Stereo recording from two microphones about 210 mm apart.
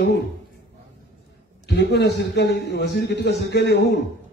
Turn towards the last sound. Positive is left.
turn(degrees=50)  # may be behind; listen again after turning